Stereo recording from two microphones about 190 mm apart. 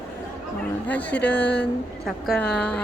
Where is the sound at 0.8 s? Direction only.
5° left (ahead or behind).